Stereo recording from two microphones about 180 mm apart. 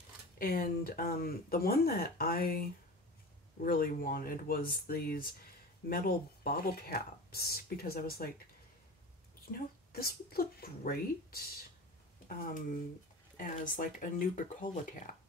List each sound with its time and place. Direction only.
0.4 s speech: 55° left (ahead or behind)
9.5 s speech: 55° left (ahead or behind)